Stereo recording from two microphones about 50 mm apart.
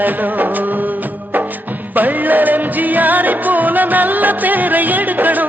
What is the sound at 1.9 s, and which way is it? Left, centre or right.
Music, right.